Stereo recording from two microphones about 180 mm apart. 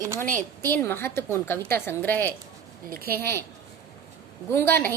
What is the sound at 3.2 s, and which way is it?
Speech, 15° left (ahead or behind).